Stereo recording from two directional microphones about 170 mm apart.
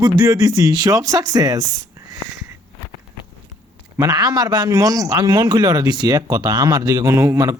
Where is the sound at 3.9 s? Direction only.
20° right (ahead or behind).